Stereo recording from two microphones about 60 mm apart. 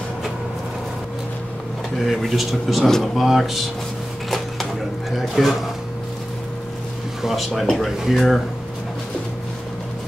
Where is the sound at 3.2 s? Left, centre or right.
Centre.